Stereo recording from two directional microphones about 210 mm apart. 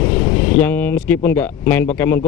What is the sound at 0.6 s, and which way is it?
A man's voice, 10° left (ahead or behind).